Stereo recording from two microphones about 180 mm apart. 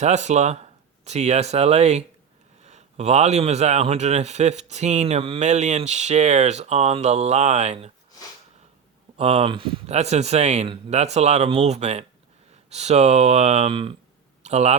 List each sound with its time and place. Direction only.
0.0 s speech: 40° right (ahead or behind)
9.1 s speech: 35° right (ahead or behind)